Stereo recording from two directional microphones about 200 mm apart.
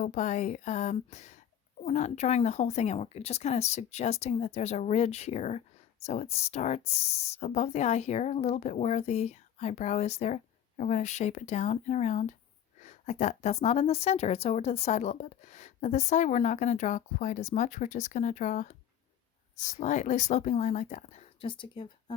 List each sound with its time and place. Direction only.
0.0 s speech: 40° left (ahead or behind)
19.8 s speech: 35° left (ahead or behind)